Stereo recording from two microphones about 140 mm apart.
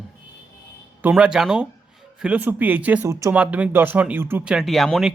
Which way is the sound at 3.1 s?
25° right (ahead or behind).